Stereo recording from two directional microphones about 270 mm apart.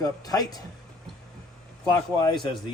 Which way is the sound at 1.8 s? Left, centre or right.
Centre.